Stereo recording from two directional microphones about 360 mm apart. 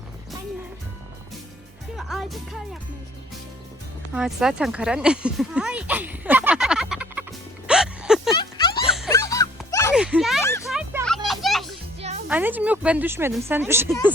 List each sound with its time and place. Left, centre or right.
2.0 s speech: centre
4.1 s speech: centre
8.3 s music: centre
8.8 s music: centre
9.9 s children playing: centre
11.9 s music: centre
12.3 s speech: centre